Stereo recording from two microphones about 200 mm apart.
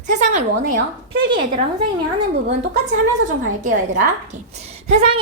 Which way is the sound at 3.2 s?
40° right (ahead or behind).